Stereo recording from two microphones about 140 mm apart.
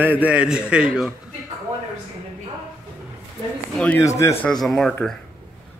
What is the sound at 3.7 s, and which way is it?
Speech, 10° left (ahead or behind).